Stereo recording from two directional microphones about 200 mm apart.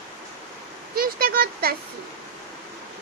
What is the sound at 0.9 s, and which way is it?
Speech, 50° right (ahead or behind).